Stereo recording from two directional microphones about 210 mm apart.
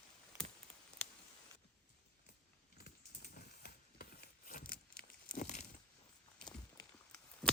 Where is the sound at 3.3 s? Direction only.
45° left (ahead or behind).